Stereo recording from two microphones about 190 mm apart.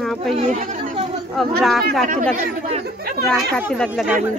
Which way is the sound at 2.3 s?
35° right (ahead or behind).